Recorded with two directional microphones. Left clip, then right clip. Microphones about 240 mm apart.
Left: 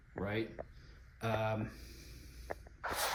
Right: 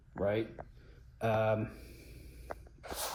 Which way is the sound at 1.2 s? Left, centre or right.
Centre.